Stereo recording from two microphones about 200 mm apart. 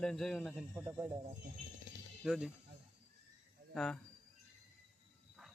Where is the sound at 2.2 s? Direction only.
5° right (ahead or behind).